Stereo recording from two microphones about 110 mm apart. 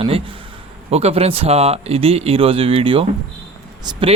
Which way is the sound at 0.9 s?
70° right (ahead or behind).